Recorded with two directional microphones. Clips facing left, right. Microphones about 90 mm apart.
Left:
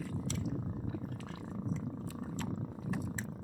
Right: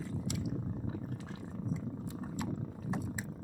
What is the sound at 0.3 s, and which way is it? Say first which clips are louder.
Cat: right 1 dB; 15° right (ahead or behind).